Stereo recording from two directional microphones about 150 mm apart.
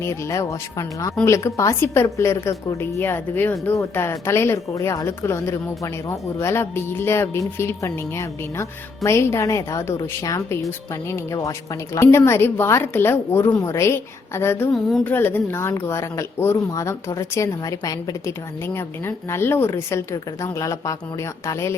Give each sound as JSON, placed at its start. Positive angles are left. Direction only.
{"t": 0.0, "sound": "a woman's voice", "side_deg": 20}